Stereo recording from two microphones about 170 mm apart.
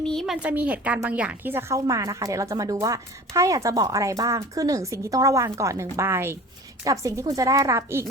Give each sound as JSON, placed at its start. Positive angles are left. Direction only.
{"t": 0.0, "sound": "speech", "side_deg": 5}
{"t": 0.4, "sound": "a woman's voice", "side_deg": -10}